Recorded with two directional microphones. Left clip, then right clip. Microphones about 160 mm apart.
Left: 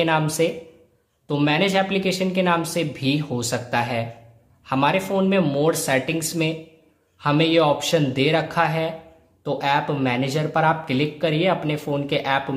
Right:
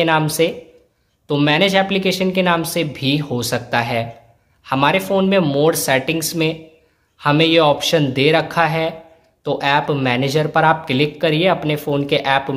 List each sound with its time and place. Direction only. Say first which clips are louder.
0.0 s speech: right 4 dB; 15° right (ahead or behind)